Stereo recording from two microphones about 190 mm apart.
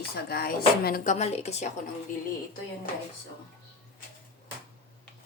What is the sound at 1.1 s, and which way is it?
Speech, 35° left (ahead or behind).